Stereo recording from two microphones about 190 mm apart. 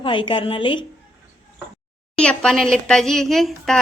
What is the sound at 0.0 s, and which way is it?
Speech, 25° left (ahead or behind).